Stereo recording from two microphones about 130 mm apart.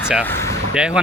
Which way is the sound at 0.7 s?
5° right (ahead or behind).